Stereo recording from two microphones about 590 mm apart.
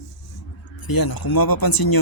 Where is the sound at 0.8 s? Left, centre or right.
Left.